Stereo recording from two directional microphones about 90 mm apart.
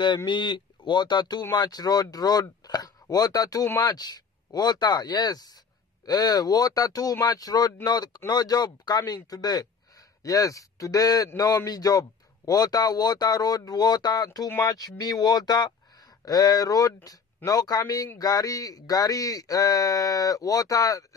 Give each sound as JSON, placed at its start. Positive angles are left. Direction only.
{"t": 0.0, "sound": "speech", "side_deg": 55}